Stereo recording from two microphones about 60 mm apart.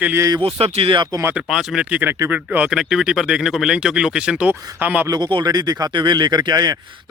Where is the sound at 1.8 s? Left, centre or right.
Right.